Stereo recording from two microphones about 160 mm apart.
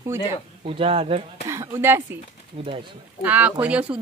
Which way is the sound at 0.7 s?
35° right (ahead or behind).